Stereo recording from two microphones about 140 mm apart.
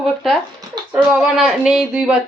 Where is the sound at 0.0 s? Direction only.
Centre (ahead or behind).